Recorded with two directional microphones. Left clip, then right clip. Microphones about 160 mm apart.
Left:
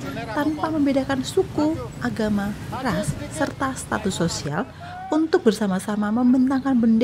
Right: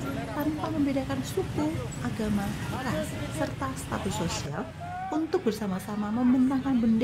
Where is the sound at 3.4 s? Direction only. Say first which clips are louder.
Left 8 dB; 45° left (ahead or behind).